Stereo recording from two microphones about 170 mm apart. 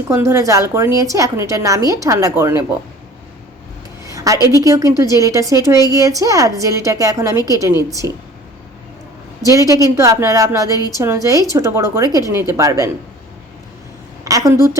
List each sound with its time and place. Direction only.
0.1 s a woman's voice: 15° right (ahead or behind)
4.1 s a sound: 20° right (ahead or behind)
4.5 s a woman's voice: 20° right (ahead or behind)
9.5 s a woman's voice: 20° right (ahead or behind)
14.3 s a woman's voice: 20° right (ahead or behind)